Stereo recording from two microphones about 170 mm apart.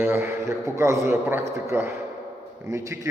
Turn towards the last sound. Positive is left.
turn(degrees=-20)  # may be behind; listen again after turning